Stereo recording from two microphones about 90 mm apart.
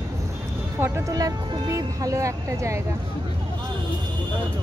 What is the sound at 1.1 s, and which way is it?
Speech, 40° right (ahead or behind).